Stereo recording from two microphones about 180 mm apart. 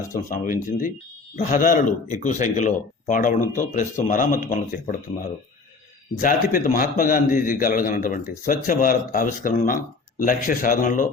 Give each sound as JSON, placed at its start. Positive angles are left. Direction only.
{"t": 0.1, "sound": "speech", "side_deg": 50}
{"t": 6.1, "sound": "speech", "side_deg": 50}